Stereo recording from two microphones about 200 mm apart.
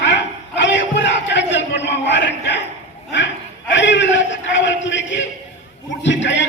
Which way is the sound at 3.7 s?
65° left (ahead or behind).